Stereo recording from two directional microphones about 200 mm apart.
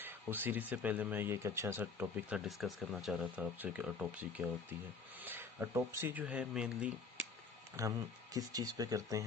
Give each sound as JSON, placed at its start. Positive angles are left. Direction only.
{"t": 0.0, "sound": "speech", "side_deg": -10}
{"t": 7.8, "sound": "speech", "side_deg": -15}